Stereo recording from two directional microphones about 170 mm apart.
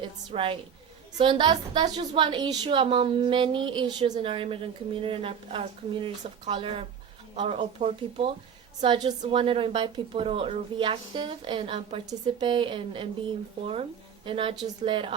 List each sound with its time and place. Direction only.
0.0 s a woman's voice: 30° right (ahead or behind)
14.3 s a woman's voice: 30° right (ahead or behind)